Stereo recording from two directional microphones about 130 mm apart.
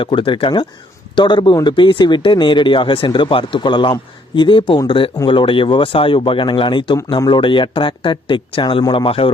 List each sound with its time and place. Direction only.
0.0 s speech: 40° left (ahead or behind)